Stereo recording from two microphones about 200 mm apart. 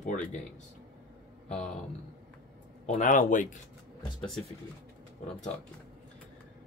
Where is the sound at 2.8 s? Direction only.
35° left (ahead or behind).